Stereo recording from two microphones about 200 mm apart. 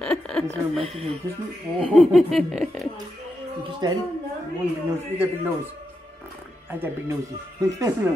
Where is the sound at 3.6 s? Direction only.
25° right (ahead or behind).